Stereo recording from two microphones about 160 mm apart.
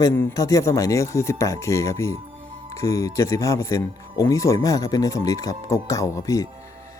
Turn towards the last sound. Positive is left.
turn(degrees=20)  # may be behind; listen again after turning